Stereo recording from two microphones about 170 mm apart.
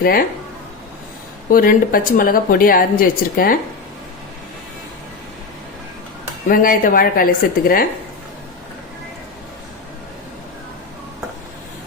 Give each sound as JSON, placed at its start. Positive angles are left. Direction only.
{"t": 1.5, "sound": "a woman's voice", "side_deg": 55}
{"t": 6.5, "sound": "a woman's voice", "side_deg": 55}